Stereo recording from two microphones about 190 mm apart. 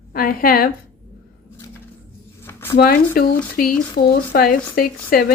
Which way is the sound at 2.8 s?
55° left (ahead or behind).